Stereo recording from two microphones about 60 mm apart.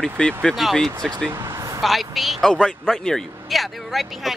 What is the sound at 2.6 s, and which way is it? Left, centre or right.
Speech, centre.